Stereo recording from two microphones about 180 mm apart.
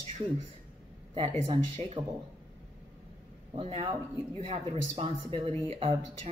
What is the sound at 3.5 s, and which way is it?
Speech, 35° right (ahead or behind).